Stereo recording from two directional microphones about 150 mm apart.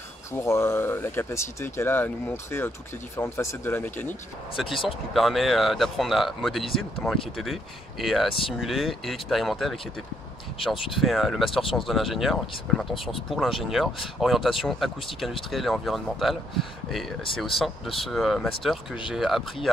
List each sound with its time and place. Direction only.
0.3 s speech: 20° left (ahead or behind)
4.6 s speech: centre (ahead or behind)